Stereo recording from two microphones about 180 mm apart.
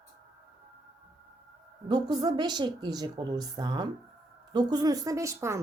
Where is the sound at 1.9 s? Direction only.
25° right (ahead or behind).